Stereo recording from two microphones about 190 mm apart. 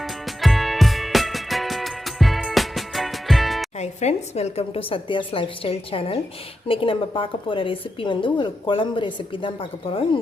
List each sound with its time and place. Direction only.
0.0 s music: centre (ahead or behind)
3.8 s a woman's voice: 35° left (ahead or behind)